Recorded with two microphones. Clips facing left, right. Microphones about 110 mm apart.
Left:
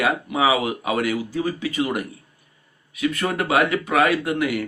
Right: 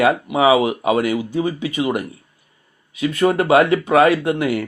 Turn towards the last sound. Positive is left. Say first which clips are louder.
# right 3 dB
turn(degrees=-30)  # may be behind; listen again after turning